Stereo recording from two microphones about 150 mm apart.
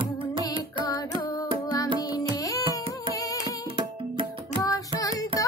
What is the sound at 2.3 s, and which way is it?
Music, 20° left (ahead or behind).